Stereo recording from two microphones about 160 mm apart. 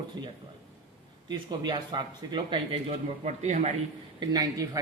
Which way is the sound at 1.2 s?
25° right (ahead or behind).